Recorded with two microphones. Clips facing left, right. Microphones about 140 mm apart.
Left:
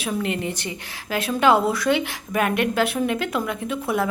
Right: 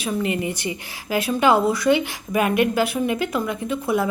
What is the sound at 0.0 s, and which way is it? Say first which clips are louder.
A woman's voice: right 2 dB; 5° right (ahead or behind).